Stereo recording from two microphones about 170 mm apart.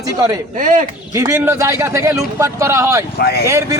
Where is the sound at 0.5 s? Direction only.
50° right (ahead or behind).